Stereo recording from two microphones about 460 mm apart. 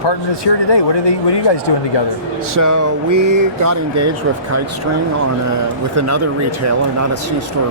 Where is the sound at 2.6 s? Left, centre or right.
Right.